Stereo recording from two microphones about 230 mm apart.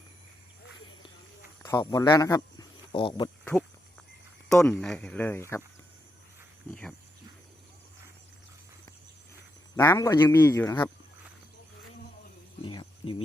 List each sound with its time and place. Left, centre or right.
1.6 s speech: centre
4.4 s speech: centre
9.7 s speech: centre
12.6 s insect: left